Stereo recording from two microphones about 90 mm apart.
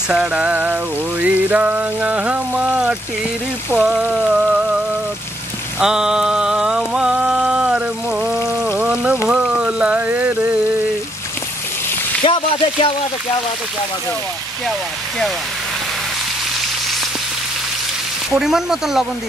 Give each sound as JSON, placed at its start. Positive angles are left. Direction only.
{"t": 0.1, "sound": "raindrop", "side_deg": -10}
{"t": 5.8, "sound": "raindrop", "side_deg": -5}
{"t": 12.2, "sound": "a sound", "side_deg": 80}
{"t": 18.3, "sound": "speech", "side_deg": -5}